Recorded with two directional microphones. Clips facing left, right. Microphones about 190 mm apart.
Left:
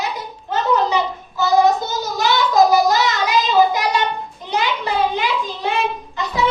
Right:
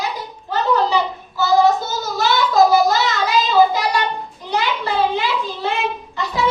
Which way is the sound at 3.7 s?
20° left (ahead or behind).